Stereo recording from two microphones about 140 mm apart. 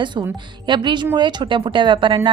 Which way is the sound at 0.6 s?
35° right (ahead or behind).